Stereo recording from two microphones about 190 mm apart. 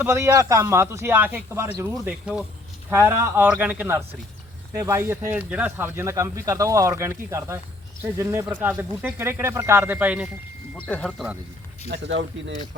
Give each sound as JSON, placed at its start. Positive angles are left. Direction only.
{"t": 0.0, "sound": "speech", "side_deg": -15}
{"t": 10.8, "sound": "speech", "side_deg": 5}
{"t": 11.9, "sound": "speech", "side_deg": -70}